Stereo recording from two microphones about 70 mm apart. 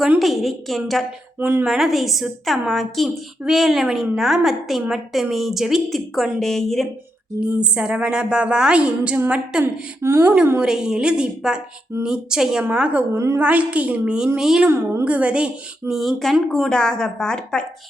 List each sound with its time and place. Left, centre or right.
0.2 s a woman's voice: centre
1.4 s a woman's voice: right
1.6 s a woman's voice: centre
7.3 s a woman's voice: centre
10.0 s speech: right
10.6 s a woman's voice: centre
13.1 s a woman's voice: right
13.4 s a woman's voice: centre
14.3 s a woman's voice: centre
14.7 s speech: right
15.0 s a woman's voice: centre
16.0 s speech: centre